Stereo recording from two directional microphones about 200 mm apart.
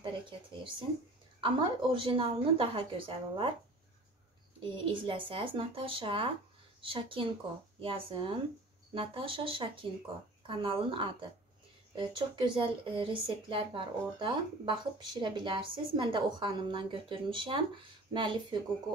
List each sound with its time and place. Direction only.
0.0 s speech: 25° right (ahead or behind)
4.6 s speech: 25° right (ahead or behind)